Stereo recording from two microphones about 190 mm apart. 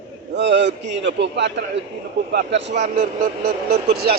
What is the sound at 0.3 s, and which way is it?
Speech, 65° right (ahead or behind).